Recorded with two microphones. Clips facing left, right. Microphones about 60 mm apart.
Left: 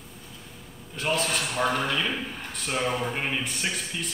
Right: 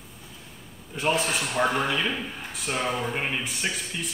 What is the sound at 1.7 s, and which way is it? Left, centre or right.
Speech, centre.